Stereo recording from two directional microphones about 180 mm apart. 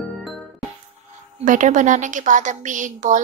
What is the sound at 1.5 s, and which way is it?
A woman's voice, 45° right (ahead or behind).